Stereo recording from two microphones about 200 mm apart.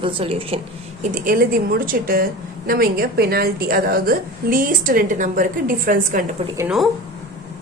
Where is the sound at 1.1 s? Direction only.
45° right (ahead or behind).